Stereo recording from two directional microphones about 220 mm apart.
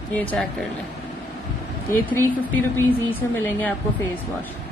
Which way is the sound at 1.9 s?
10° left (ahead or behind).